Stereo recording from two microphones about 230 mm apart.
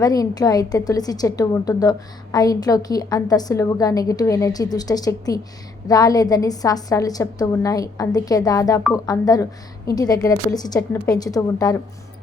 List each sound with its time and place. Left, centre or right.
0.0 s a woman's voice: centre